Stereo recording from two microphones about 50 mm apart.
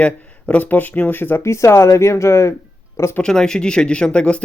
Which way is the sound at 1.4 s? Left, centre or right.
Left.